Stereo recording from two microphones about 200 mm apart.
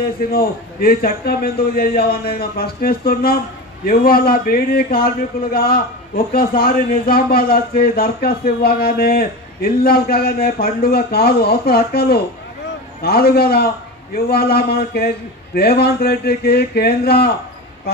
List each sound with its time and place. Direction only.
0.3 s a man's voice: 50° left (ahead or behind)